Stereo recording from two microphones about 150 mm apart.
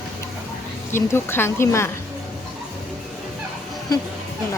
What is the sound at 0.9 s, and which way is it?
Speech, 15° left (ahead or behind).